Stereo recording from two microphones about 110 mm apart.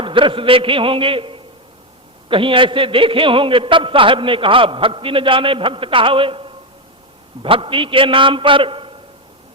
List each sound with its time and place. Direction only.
0.0 s a man's voice: 50° right (ahead or behind)